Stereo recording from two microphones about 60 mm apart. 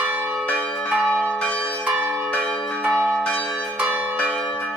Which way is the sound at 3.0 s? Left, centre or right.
Centre.